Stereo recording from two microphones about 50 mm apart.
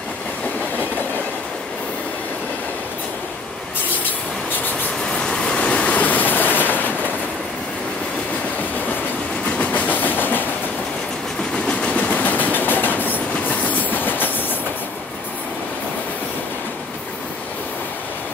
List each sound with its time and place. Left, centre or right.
5.2 s train: centre; by 7.1 s left
9.6 s train: left
11.6 s train: left
12.0 s train: left